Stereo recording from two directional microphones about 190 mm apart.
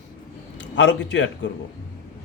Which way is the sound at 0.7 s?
70° left (ahead or behind).